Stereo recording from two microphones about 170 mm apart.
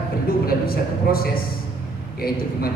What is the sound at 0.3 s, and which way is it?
A woman's voice, 60° left (ahead or behind).